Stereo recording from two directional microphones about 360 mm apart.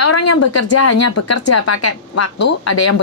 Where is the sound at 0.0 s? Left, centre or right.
Left.